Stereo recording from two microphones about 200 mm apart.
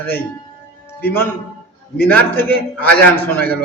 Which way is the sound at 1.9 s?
10° left (ahead or behind).